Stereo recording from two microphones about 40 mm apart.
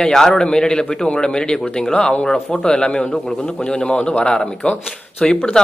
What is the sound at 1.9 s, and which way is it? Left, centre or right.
Speech, left.